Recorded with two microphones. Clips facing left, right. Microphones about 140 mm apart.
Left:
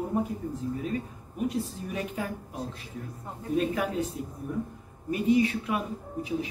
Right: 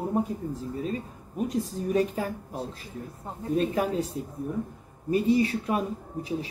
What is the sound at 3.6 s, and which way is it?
A woman's voice, 35° right (ahead or behind).